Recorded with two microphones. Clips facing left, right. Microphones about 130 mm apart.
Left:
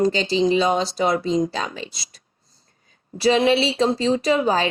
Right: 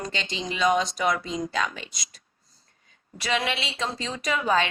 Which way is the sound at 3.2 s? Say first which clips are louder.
Left 11 dB; 30° left (ahead or behind).